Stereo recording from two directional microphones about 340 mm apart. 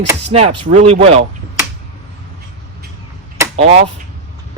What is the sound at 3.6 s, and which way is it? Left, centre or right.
Speech, right.